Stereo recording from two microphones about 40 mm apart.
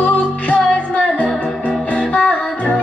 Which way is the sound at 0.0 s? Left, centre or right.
Left.